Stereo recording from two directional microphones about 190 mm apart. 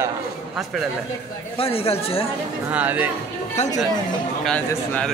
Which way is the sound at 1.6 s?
30° left (ahead or behind).